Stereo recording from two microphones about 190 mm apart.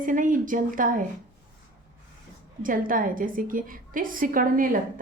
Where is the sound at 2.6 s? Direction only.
45° right (ahead or behind).